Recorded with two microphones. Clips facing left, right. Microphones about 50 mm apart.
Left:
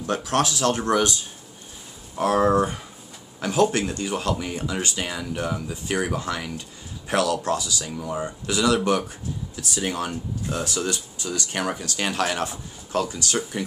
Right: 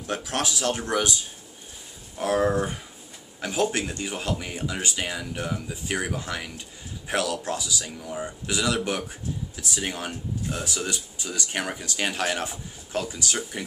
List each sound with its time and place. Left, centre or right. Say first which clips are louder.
0.0 s speech: left 5 dB; centre
2.1 s speech: left 4 dB; centre